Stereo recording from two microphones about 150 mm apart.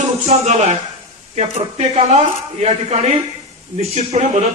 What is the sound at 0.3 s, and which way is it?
Speech, 45° right (ahead or behind).